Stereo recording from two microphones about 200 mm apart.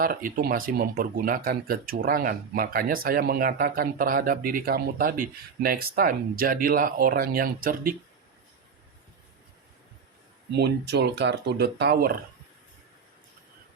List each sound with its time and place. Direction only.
0.0 s speech: 45° right (ahead or behind)
10.5 s speech: 55° right (ahead or behind)